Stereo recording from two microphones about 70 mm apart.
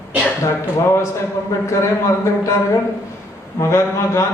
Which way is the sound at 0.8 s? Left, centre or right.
Left.